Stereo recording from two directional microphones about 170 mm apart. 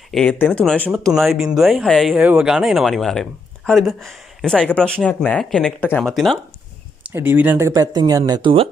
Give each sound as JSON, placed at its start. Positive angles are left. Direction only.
{"t": 0.1, "sound": "speech", "side_deg": 5}
{"t": 7.1, "sound": "speech", "side_deg": -15}